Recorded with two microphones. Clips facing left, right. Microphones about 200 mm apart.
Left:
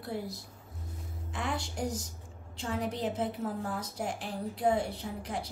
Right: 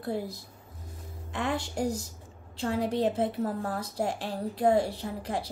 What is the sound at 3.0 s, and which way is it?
A woman's voice, 65° right (ahead or behind).